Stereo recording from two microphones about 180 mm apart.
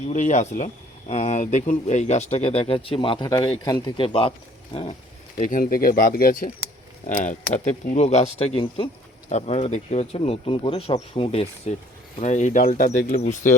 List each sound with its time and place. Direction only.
0.1 s speech: 40° left (ahead or behind)
5.4 s speech: 45° left (ahead or behind)